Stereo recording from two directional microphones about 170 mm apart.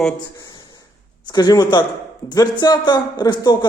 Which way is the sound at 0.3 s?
25° left (ahead or behind).